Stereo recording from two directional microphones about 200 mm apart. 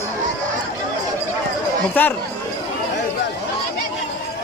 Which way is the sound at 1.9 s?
10° left (ahead or behind).